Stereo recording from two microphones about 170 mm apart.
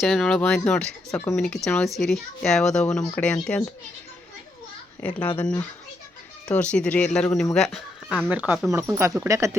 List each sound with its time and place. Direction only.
0.0 s speech: centre (ahead or behind)
5.0 s speech: 10° left (ahead or behind)
8.3 s speech: 10° right (ahead or behind)
8.7 s speech: 15° right (ahead or behind)